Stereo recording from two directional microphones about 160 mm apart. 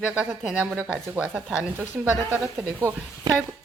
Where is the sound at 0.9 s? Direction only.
10° right (ahead or behind).